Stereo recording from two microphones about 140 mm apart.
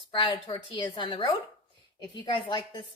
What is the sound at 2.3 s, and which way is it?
Speech, 35° left (ahead or behind).